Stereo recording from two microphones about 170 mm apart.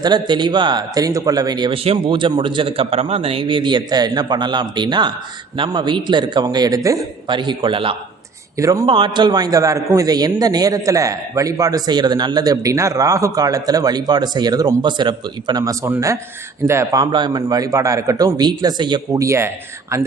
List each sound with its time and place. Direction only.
0.0 s a man's voice: 25° right (ahead or behind)
8.5 s a man's voice: 20° right (ahead or behind)